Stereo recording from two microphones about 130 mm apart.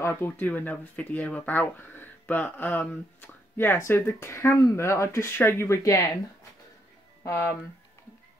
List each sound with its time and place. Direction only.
0.0 s speech: 20° left (ahead or behind)